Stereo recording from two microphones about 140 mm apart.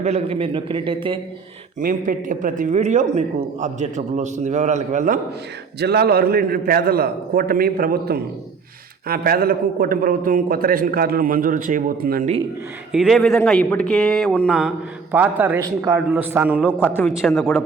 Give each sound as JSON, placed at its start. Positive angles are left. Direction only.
{"t": 0.0, "sound": "a man's voice", "side_deg": -45}
{"t": 1.8, "sound": "a man's voice", "side_deg": -70}
{"t": 5.9, "sound": "a man's voice", "side_deg": -90}
{"t": 12.9, "sound": "speech", "side_deg": -5}
{"t": 15.1, "sound": "a man's voice", "side_deg": -10}
{"t": 16.6, "sound": "a man's voice", "side_deg": 15}
{"t": 17.2, "sound": "speech", "side_deg": 0}